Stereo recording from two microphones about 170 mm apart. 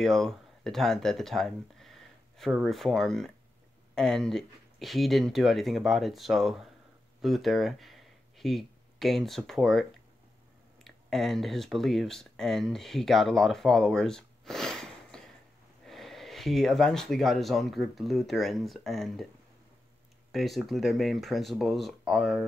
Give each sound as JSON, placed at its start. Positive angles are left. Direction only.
{"t": 0.0, "sound": "speech", "side_deg": 0}
{"t": 20.2, "sound": "speech", "side_deg": 0}